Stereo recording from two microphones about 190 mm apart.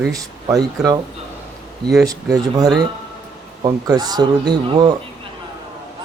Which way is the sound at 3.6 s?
20° right (ahead or behind).